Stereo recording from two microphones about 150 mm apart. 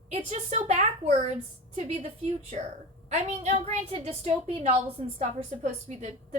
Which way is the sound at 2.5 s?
45° right (ahead or behind).